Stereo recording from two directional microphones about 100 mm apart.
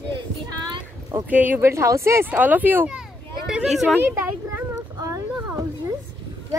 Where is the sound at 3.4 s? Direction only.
5° right (ahead or behind).